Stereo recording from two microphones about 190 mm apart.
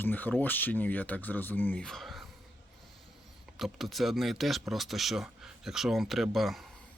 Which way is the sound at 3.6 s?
Centre (ahead or behind).